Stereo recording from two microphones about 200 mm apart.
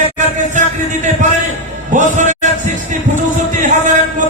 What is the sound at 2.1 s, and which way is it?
Music, 35° right (ahead or behind).